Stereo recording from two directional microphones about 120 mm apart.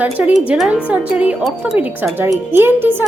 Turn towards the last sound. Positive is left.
turn(degrees=-15)  # may be behind; listen again after turning